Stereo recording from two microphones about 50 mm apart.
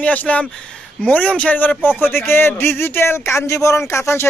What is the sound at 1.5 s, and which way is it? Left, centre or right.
Speech, left.